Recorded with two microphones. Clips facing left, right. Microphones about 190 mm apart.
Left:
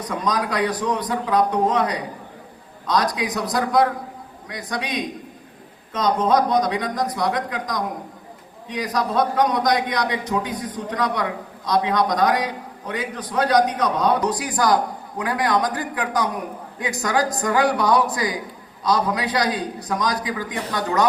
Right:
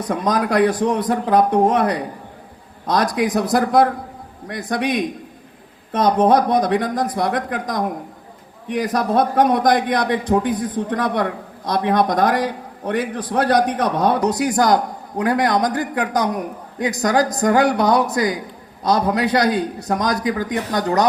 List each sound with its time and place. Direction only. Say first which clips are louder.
0.1 s a man's voice: right 5 dB; 55° right (ahead or behind); by 21.1 s 40° right (ahead or behind)